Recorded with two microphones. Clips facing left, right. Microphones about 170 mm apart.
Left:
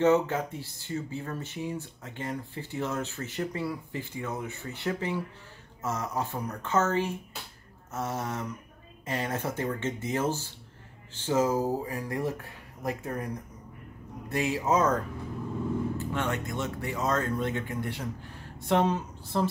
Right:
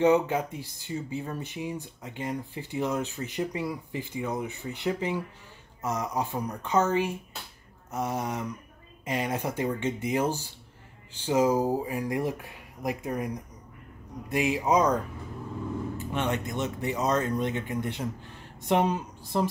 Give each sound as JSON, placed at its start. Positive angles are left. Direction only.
{"t": 0.0, "sound": "speech", "side_deg": -15}
{"t": 16.1, "sound": "speech", "side_deg": -20}